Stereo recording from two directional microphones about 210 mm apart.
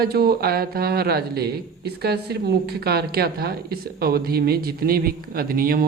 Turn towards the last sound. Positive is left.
turn(degrees=-40)  # may be behind; listen again after turning